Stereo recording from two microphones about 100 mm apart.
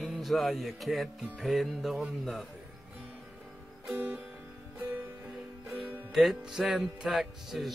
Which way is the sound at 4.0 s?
20° right (ahead or behind).